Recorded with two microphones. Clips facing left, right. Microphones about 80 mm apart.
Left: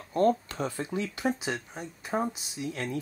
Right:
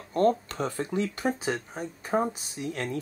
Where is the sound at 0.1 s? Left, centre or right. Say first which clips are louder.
Right 1 dB; right.